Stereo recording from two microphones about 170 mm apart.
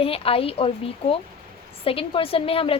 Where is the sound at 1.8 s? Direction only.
35° left (ahead or behind).